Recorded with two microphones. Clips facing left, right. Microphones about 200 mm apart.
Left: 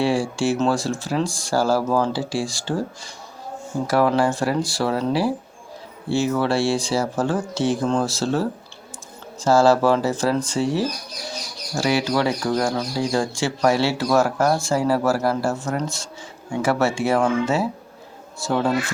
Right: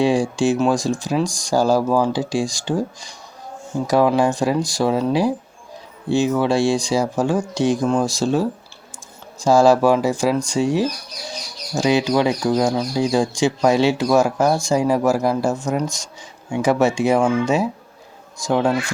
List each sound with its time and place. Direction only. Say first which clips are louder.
0.0 s speech: right 3 dB; 15° right (ahead or behind)